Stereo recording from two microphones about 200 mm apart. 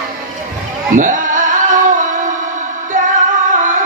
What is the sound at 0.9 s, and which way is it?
Music, 40° right (ahead or behind).